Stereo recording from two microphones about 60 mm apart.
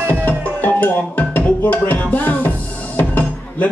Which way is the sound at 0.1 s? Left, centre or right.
Left.